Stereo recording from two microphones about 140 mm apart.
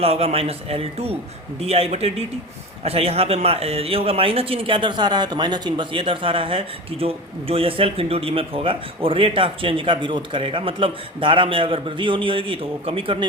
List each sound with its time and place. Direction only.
0.0 s a man's voice: 45° right (ahead or behind)